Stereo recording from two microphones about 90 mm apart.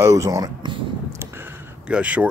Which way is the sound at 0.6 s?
60° right (ahead or behind).